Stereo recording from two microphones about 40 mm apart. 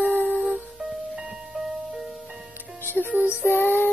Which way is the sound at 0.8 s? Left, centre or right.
Centre.